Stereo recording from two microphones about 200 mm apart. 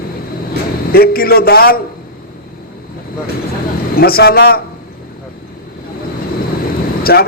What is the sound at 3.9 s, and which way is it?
Speech, 50° left (ahead or behind).